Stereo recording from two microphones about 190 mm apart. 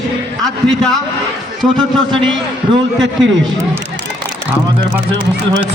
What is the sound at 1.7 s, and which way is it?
Speech, 25° right (ahead or behind).